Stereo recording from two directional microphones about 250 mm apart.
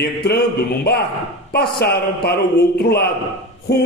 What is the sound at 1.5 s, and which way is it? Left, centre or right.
Speech, left.